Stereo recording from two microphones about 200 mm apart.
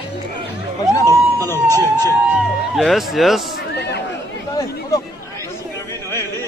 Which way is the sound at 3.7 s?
55° left (ahead or behind).